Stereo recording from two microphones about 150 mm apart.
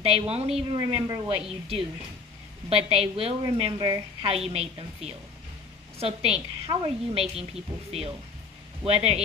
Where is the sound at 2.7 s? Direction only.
40° right (ahead or behind).